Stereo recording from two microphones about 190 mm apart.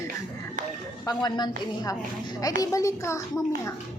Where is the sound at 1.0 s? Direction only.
20° left (ahead or behind).